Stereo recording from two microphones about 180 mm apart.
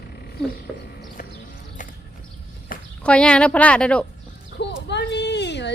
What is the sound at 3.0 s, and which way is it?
A woman's voice, 5° left (ahead or behind).